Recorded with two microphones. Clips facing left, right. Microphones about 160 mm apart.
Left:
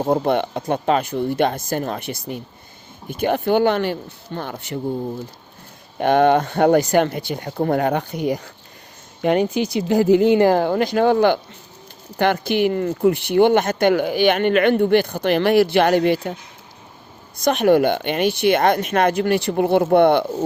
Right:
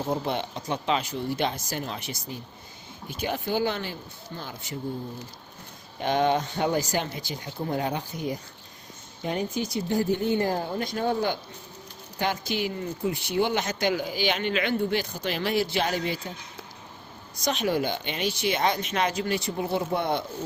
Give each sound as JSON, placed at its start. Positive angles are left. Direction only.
{"t": 0.1, "sound": "speech", "side_deg": 55}
{"t": 6.0, "sound": "speech", "side_deg": 60}
{"t": 12.2, "sound": "speech", "side_deg": 60}
{"t": 17.4, "sound": "speech", "side_deg": 55}